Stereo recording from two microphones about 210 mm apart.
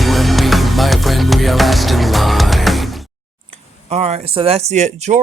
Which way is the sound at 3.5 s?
30° right (ahead or behind).